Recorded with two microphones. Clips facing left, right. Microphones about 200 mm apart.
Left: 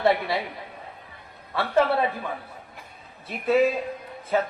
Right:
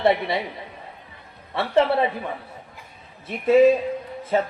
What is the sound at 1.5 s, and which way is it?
Speech, 25° right (ahead or behind).